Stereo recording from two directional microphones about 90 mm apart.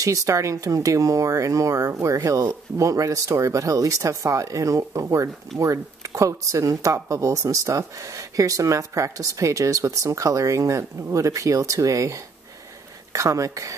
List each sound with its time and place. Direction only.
0.0 s speech: 35° right (ahead or behind)